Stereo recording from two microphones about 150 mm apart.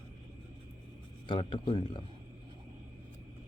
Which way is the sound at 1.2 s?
35° left (ahead or behind).